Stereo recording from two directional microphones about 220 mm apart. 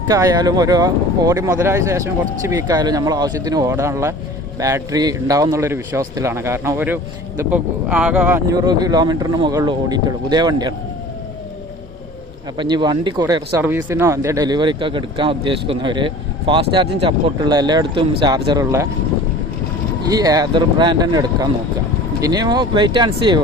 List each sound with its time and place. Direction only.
0.1 s speech: 15° right (ahead or behind)
8.5 s speech: 20° right (ahead or behind)
12.5 s speech: 20° right (ahead or behind)
20.1 s speech: 15° right (ahead or behind)